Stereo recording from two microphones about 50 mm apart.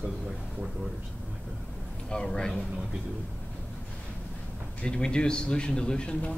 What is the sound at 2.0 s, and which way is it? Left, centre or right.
Speech, centre.